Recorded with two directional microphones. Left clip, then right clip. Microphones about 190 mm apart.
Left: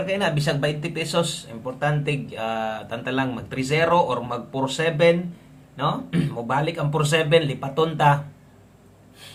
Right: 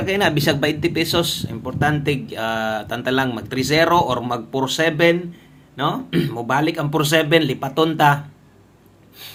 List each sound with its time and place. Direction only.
0.0 s speech: 40° right (ahead or behind)